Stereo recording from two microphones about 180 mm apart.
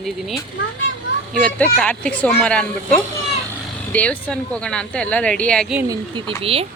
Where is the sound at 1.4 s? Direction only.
10° left (ahead or behind).